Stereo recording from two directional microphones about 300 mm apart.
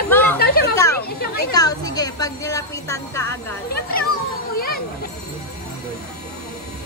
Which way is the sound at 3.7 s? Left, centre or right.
Left.